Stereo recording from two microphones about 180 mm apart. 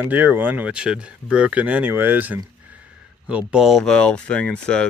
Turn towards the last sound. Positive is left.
turn(degrees=5)  # may be behind; listen again after turning